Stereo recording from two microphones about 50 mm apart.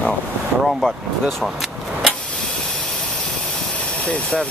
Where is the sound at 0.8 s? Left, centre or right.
Centre.